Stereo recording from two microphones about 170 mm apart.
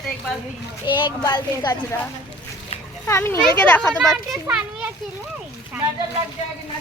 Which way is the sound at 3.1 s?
15° left (ahead or behind).